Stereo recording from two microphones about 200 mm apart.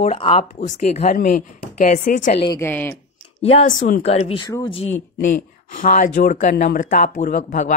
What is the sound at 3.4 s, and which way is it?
Speech, 30° left (ahead or behind).